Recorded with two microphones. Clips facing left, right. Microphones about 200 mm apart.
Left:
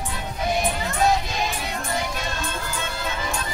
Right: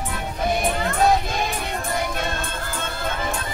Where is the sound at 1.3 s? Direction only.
55° right (ahead or behind).